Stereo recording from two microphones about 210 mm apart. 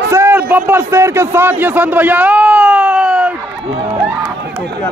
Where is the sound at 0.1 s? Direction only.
10° right (ahead or behind).